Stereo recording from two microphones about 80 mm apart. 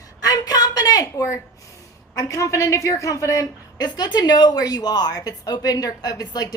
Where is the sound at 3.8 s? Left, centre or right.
Left.